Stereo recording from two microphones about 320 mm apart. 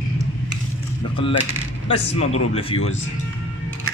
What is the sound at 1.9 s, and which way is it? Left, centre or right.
A man's voice, centre.